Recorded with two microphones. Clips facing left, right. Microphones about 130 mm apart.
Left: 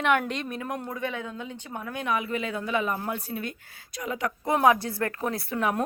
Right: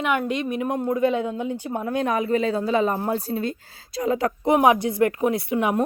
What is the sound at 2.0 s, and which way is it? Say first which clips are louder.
Speech: right 6 dB; 40° right (ahead or behind).